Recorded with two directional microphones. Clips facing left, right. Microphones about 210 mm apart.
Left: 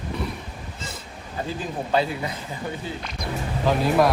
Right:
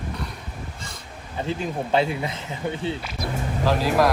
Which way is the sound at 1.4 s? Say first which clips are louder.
Right 4 dB; 25° right (ahead or behind).